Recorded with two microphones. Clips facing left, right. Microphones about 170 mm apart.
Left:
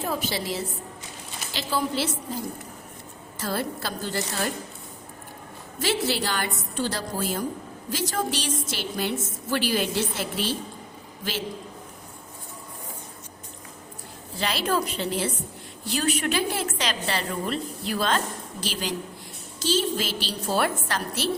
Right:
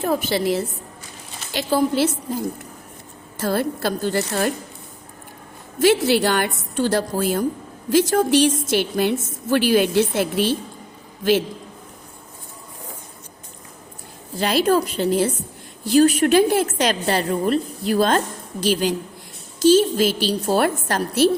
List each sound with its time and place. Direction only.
0.0 s a woman's voice: 55° right (ahead or behind)
3.3 s a woman's voice: 50° right (ahead or behind)
5.8 s a woman's voice: 55° right (ahead or behind)
14.3 s a woman's voice: 45° right (ahead or behind)